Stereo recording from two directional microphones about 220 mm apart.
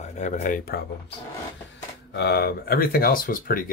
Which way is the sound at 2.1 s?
50° left (ahead or behind).